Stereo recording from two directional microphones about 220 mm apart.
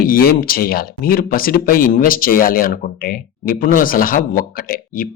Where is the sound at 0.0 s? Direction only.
40° left (ahead or behind).